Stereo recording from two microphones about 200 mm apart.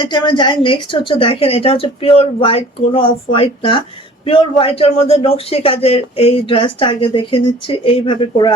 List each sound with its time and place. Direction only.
0.0 s a man's voice: 20° left (ahead or behind)